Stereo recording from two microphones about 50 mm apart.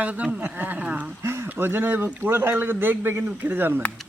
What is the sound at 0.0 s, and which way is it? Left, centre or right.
Speech, right.